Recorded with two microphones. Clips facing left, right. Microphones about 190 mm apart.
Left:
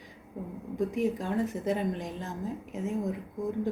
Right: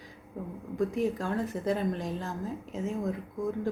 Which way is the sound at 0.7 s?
20° left (ahead or behind).